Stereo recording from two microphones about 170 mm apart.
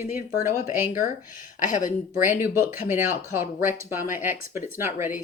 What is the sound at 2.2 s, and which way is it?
Speech, 10° right (ahead or behind).